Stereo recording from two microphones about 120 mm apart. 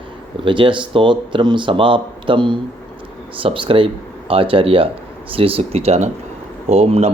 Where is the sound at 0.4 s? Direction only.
45° right (ahead or behind).